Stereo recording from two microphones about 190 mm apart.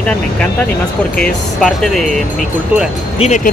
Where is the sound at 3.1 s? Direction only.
40° left (ahead or behind).